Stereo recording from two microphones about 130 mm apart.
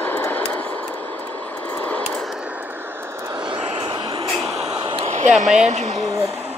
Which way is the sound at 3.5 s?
40° right (ahead or behind).